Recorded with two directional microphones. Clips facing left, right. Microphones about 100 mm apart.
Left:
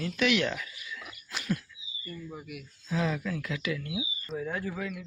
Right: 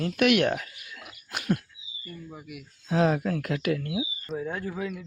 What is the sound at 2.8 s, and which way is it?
Speech, 60° right (ahead or behind).